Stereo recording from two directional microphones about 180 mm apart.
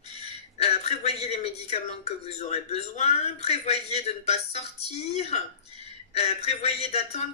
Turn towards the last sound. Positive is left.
turn(degrees=35)  # may be behind; listen again after turning